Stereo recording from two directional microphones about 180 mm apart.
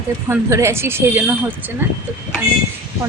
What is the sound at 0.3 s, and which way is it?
Speech, 15° right (ahead or behind).